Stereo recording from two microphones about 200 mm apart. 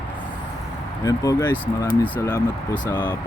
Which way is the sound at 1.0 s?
15° left (ahead or behind).